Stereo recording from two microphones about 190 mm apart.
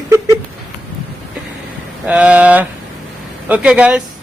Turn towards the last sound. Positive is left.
turn(degrees=-5)  # may be behind; listen again after turning